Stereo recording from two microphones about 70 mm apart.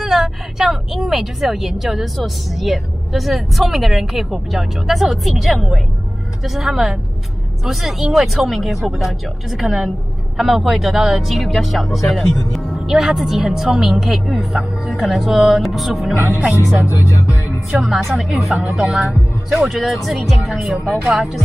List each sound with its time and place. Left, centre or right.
0.0 s speech: centre
16.5 s music: left
17.8 s speech: centre